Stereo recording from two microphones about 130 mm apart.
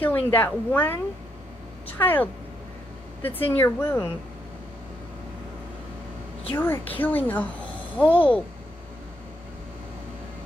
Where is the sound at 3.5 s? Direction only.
15° left (ahead or behind).